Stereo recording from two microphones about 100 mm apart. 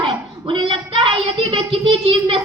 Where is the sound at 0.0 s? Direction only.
60° right (ahead or behind).